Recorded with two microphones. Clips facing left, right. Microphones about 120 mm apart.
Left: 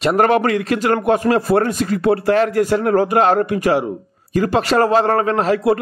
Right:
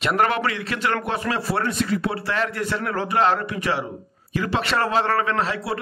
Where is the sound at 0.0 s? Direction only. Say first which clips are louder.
Left 7 dB; 40° left (ahead or behind).